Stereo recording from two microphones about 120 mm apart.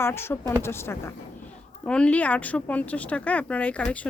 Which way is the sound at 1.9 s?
10° left (ahead or behind).